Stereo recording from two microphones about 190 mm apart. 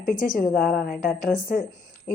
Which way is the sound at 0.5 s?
Centre (ahead or behind).